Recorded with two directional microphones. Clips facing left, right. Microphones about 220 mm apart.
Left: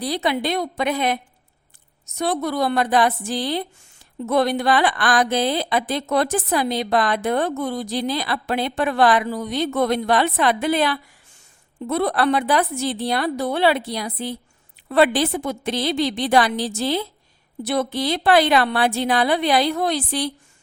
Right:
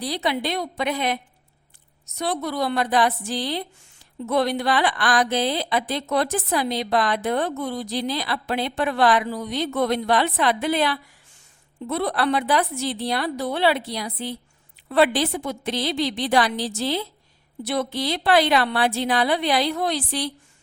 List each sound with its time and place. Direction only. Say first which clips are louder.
0.0 s a woman's voice: left 3 dB; 50° left (ahead or behind)